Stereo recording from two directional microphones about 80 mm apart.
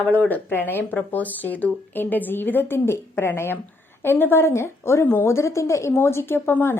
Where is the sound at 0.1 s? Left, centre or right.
Left.